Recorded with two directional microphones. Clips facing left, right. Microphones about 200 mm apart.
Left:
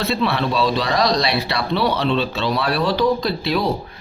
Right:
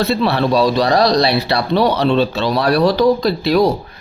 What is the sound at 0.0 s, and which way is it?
Speech, 40° right (ahead or behind).